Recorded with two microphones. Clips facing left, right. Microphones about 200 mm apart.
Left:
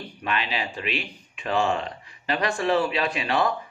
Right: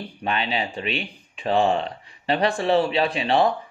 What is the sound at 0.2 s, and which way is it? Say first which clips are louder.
Speech: right 3 dB; 35° right (ahead or behind).